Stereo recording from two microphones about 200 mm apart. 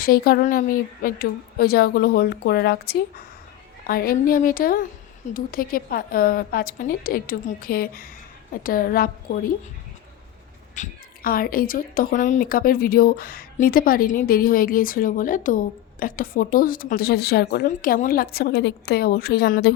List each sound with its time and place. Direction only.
0.0 s a woman's voice: 50° left (ahead or behind)
10.8 s a woman's voice: 45° left (ahead or behind)